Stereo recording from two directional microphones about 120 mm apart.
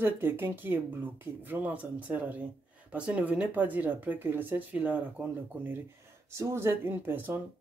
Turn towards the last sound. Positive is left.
turn(degrees=-20)  # may be behind; listen again after turning